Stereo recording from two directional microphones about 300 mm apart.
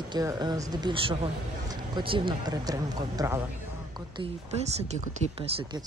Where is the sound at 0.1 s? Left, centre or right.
Centre.